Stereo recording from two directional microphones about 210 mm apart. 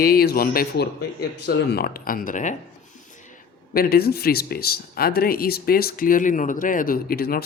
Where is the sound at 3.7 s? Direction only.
45° left (ahead or behind).